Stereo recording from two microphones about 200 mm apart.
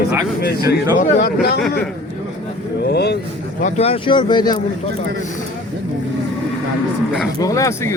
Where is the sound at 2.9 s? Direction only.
55° left (ahead or behind).